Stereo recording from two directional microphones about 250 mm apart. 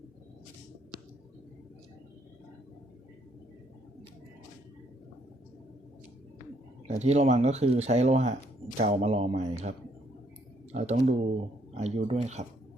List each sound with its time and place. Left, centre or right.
6.8 s speech: right